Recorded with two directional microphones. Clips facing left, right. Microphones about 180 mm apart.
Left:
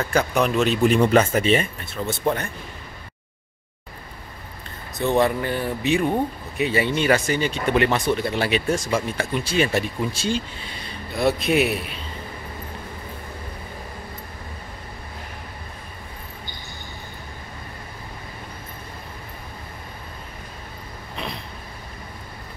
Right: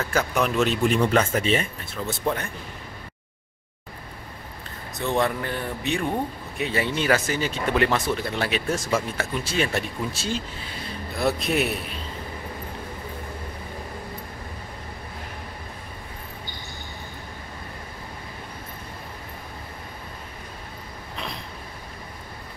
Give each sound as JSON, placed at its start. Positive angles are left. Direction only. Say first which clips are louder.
{"t": 0.0, "sound": "speech", "louder": "left 3 dB", "side_deg": 0}
{"t": 5.0, "sound": "speech", "louder": "left 4 dB", "side_deg": 0}